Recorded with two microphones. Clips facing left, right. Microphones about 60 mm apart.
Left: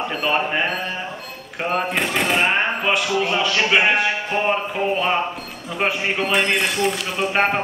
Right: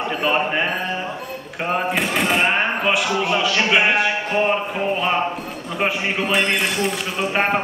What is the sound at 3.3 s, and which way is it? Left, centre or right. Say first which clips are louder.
A man's voice: right 1 dB; centre.